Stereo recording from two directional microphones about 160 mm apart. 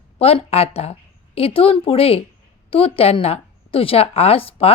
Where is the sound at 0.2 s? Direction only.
40° left (ahead or behind).